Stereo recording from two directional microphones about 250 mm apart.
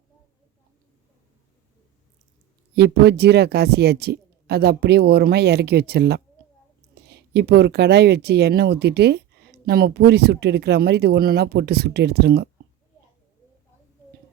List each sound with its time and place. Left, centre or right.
2.7 s a woman's voice: right